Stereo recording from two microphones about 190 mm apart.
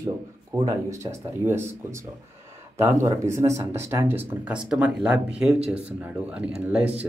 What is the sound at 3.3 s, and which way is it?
Speech, 15° right (ahead or behind).